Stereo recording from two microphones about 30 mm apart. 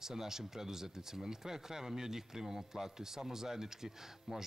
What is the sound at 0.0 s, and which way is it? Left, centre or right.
Speech, centre.